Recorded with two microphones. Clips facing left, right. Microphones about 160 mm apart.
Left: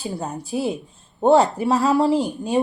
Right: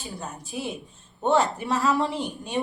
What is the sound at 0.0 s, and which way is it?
A woman's voice, 35° left (ahead or behind).